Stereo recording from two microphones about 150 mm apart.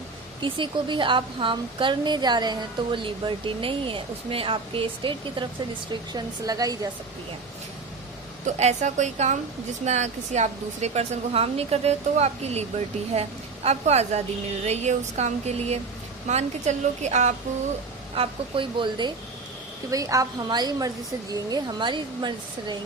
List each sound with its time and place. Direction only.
0.4 s a woman's voice: 35° right (ahead or behind)
8.4 s speech: 50° right (ahead or behind)
18.1 s a woman's voice: 35° right (ahead or behind)